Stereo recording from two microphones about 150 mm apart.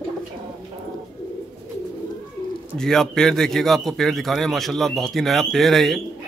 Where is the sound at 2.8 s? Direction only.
5° left (ahead or behind).